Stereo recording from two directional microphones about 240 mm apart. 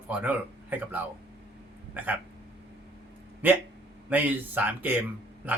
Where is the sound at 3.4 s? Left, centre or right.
Centre.